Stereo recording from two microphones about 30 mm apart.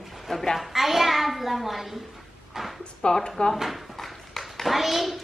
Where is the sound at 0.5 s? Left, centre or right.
Centre.